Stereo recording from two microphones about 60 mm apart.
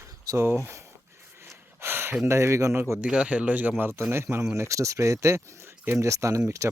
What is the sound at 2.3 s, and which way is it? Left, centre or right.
Speech, right.